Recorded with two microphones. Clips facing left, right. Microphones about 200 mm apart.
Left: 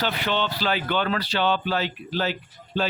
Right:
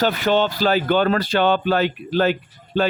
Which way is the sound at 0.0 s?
45° right (ahead or behind).